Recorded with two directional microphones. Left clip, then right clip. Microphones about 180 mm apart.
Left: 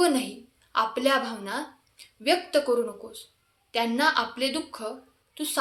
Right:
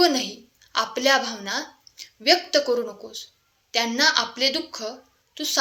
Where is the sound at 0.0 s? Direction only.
10° right (ahead or behind).